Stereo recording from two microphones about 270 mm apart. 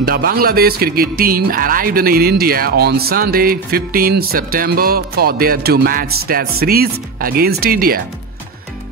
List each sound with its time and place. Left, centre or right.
0.0 s speech: right